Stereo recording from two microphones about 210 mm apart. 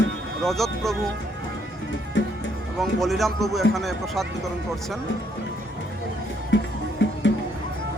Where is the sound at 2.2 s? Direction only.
60° left (ahead or behind).